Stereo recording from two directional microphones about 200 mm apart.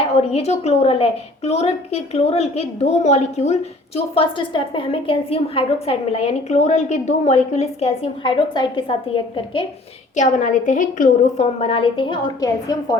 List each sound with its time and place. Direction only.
0.1 s a woman's voice: 30° left (ahead or behind)
10.2 s a woman's voice: 35° left (ahead or behind)
11.6 s a woman's voice: 25° left (ahead or behind)